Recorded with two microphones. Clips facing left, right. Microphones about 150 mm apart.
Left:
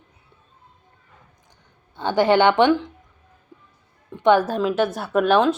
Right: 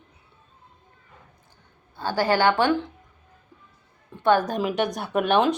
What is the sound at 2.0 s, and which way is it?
Speech, 20° left (ahead or behind).